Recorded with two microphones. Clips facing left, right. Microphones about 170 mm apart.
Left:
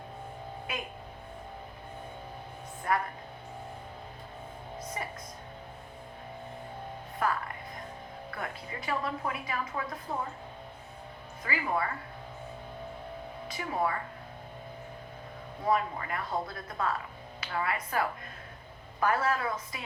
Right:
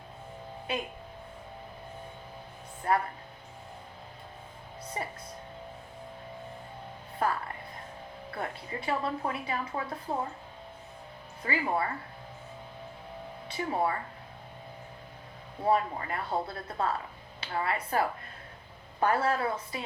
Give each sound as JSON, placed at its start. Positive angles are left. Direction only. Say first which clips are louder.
{"t": 0.7, "sound": "a woman's voice", "louder": "right 5 dB", "side_deg": -30}
{"t": 2.9, "sound": "a woman's voice", "louder": "right 2 dB", "side_deg": -30}
{"t": 7.2, "sound": "music", "louder": "right 1 dB", "side_deg": -30}
{"t": 8.4, "sound": "a woman's voice", "louder": "right 3 dB", "side_deg": -30}
{"t": 11.4, "sound": "a woman's voice", "louder": "right 2 dB", "side_deg": -30}
{"t": 13.5, "sound": "a woman's voice", "louder": "right 2 dB", "side_deg": -30}
{"t": 15.6, "sound": "a woman's voice", "louder": "right 2 dB", "side_deg": -30}